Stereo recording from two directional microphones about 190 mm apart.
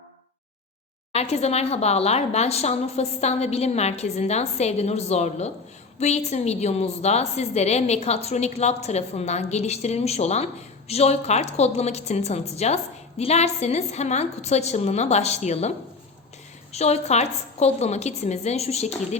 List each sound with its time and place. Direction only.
1.1 s a woman's voice: 35° left (ahead or behind)
16.7 s a woman's voice: 35° left (ahead or behind)